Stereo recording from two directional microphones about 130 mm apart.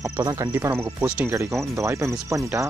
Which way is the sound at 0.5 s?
20° right (ahead or behind).